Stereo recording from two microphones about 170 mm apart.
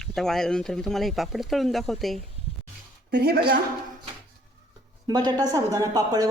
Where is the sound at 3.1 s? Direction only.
70° right (ahead or behind).